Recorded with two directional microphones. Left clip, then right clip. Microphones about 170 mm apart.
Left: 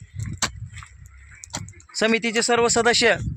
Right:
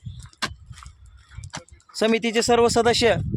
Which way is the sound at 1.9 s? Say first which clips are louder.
Even; 10° right (ahead or behind).